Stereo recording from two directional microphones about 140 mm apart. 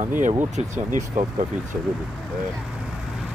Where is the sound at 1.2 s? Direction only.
70° right (ahead or behind).